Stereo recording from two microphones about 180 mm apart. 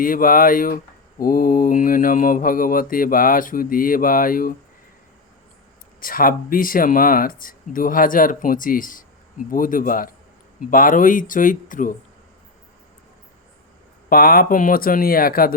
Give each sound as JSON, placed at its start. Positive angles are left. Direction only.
{"t": 0.0, "sound": "mantra", "side_deg": 50}
{"t": 6.0, "sound": "mantra", "side_deg": 50}
{"t": 14.1, "sound": "mantra", "side_deg": 55}